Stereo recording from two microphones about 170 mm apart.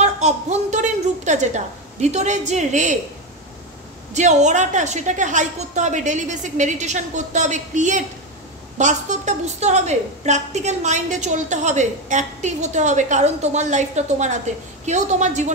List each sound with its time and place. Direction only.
0.0 s a woman's voice: 40° right (ahead or behind)
4.1 s a woman's voice: 45° right (ahead or behind)